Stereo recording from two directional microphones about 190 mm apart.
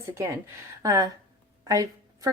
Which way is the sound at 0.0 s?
15° right (ahead or behind).